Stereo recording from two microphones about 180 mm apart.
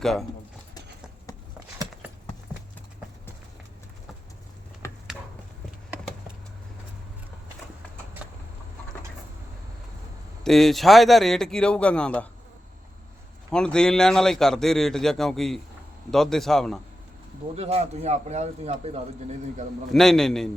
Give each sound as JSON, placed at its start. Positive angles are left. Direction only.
{"t": 0.0, "sound": "a man's voice", "side_deg": 0}
{"t": 1.5, "sound": "a sound", "side_deg": -15}
{"t": 10.4, "sound": "a man's voice", "side_deg": 0}
{"t": 13.5, "sound": "a man's voice", "side_deg": 5}
{"t": 17.5, "sound": "a man's voice", "side_deg": -35}
{"t": 19.9, "sound": "a man's voice", "side_deg": 0}